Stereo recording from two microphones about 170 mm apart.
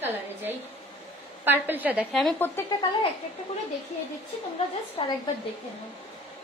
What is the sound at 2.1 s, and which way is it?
Speech, 5° left (ahead or behind).